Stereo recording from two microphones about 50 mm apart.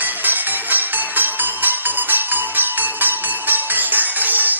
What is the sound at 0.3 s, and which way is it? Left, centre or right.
Music, right.